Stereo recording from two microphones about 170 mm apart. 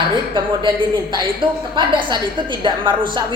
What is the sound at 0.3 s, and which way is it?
A woman's voice, 25° right (ahead or behind).